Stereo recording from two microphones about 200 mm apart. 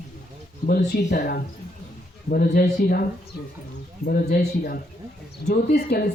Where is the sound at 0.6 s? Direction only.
50° left (ahead or behind).